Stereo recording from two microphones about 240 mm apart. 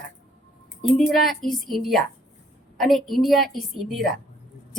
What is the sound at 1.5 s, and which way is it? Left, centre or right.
A woman's voice, centre.